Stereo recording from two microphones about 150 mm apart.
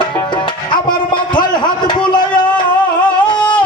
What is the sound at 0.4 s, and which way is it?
Music, 30° left (ahead or behind).